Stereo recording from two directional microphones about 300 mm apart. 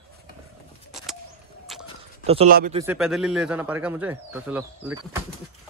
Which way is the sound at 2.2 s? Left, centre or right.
Centre.